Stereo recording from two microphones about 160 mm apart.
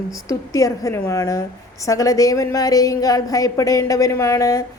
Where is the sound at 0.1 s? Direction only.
20° left (ahead or behind).